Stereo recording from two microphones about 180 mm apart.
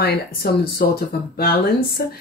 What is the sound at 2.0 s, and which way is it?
Speech, 60° left (ahead or behind).